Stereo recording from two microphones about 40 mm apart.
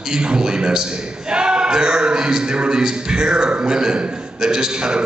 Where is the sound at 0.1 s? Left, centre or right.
Right.